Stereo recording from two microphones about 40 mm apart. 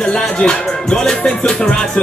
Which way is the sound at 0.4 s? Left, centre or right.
Left.